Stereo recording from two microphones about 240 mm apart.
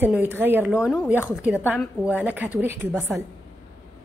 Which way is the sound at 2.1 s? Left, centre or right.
Centre.